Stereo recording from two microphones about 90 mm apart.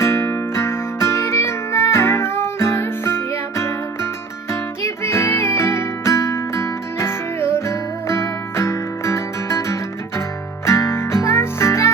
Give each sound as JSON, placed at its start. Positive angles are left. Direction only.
{"t": 0.0, "sound": "music", "side_deg": 30}
{"t": 4.8, "sound": "music", "side_deg": 30}